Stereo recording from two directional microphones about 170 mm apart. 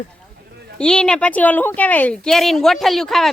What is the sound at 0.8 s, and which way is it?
A woman's voice, 5° left (ahead or behind).